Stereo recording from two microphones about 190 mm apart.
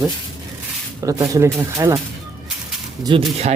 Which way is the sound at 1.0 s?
15° right (ahead or behind).